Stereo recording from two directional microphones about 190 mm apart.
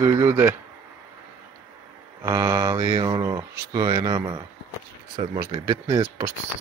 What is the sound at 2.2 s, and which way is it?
Speech, 15° right (ahead or behind).